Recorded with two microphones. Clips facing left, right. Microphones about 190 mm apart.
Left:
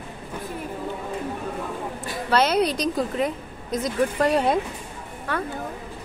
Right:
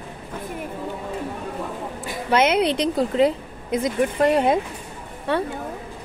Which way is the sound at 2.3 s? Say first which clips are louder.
Right 2 dB; 20° right (ahead or behind).